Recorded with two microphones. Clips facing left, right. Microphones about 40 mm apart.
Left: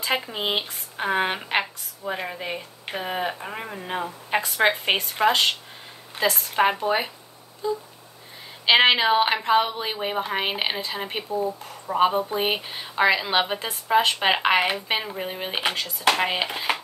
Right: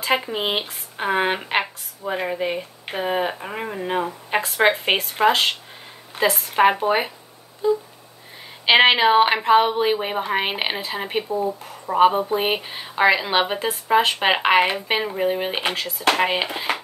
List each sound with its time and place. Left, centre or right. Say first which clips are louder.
0.0 s a woman's voice: right 4 dB; centre
7.6 s a sound: right 7 dB; centre
8.6 s a woman's voice: right 3 dB; centre